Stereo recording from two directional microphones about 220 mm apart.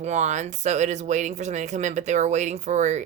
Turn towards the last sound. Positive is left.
turn(degrees=-30)  # may be behind; listen again after turning